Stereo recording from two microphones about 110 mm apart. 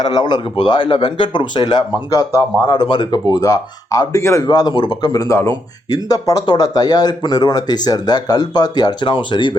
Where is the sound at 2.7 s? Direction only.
50° left (ahead or behind).